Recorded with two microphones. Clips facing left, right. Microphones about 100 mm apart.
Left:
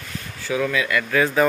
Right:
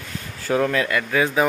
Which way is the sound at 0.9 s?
20° right (ahead or behind).